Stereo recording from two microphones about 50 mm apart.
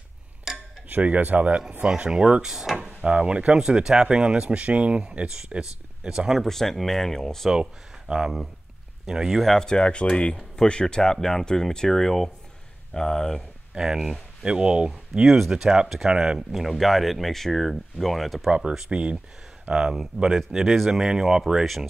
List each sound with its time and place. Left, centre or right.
0.8 s speech: right
2.0 s speech: centre
6.4 s speech: centre
8.1 s speech: right
9.0 s speech: centre
9.4 s speech: centre
13.7 s speech: centre
18.7 s speech: centre